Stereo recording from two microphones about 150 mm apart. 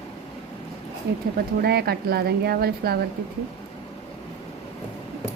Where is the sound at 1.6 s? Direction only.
90° right.